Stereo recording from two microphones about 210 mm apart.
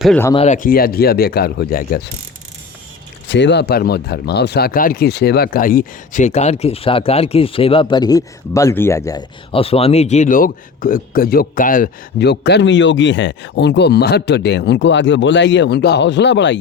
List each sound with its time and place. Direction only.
0.0 s speech: 5° left (ahead or behind)
0.3 s speech: 35° left (ahead or behind)
3.2 s speech: 55° left (ahead or behind)